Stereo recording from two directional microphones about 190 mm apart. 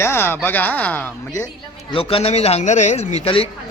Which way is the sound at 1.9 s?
30° left (ahead or behind).